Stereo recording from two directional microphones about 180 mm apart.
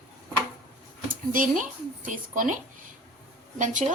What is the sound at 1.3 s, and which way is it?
A woman's voice, 50° right (ahead or behind).